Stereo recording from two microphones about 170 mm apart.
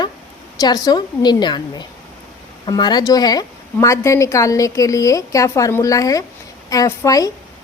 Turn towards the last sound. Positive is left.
turn(degrees=20)  # may be behind; listen again after turning